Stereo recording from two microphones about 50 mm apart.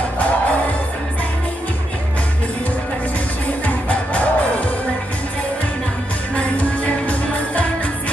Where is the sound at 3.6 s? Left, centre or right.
Left.